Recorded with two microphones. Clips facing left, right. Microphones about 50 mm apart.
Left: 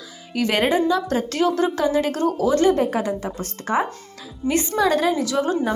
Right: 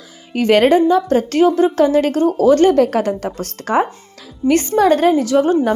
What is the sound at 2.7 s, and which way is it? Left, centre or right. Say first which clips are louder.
Speech: right 7 dB; right.